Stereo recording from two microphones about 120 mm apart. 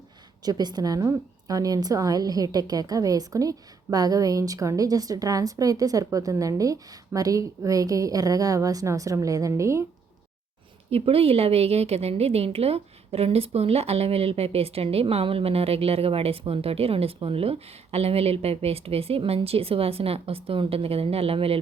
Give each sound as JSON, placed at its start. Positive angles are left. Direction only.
{"t": 0.4, "sound": "a woman's voice", "side_deg": -35}
{"t": 10.9, "sound": "a woman's voice", "side_deg": -55}